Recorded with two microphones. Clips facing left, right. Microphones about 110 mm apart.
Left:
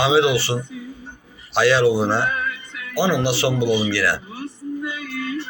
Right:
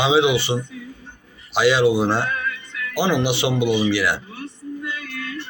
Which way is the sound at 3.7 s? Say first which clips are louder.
Even; 10° left (ahead or behind).